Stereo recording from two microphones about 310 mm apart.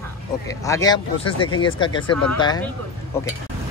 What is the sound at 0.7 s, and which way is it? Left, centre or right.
Speech, centre.